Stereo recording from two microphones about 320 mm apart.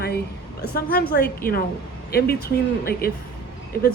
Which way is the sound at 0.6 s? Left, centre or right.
Left.